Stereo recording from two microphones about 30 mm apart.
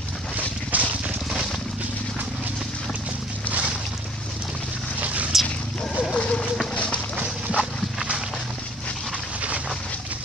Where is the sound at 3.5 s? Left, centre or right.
Right.